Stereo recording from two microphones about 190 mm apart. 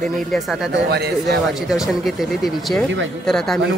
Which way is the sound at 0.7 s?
60° right (ahead or behind).